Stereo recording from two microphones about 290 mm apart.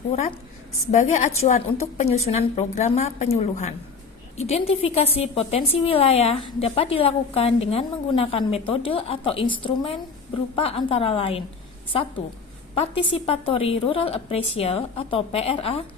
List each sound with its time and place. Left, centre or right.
0.1 s a woman's voice: left
12.7 s a woman's voice: centre